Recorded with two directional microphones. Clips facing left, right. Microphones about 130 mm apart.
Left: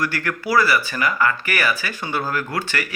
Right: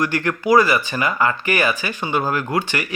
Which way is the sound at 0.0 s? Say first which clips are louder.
Right 4 dB; 20° right (ahead or behind).